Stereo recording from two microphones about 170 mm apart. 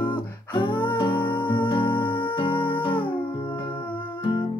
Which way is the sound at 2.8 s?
30° left (ahead or behind).